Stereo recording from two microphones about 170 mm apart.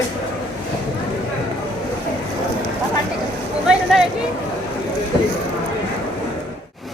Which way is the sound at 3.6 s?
5° right (ahead or behind).